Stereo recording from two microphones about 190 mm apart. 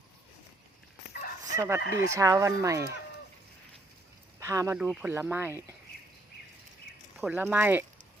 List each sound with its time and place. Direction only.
1.5 s speech: 15° right (ahead or behind)
1.8 s speech: 50° left (ahead or behind)
2.1 s speech: 15° right (ahead or behind)
4.4 s speech: 15° right (ahead or behind)
7.2 s speech: 10° right (ahead or behind)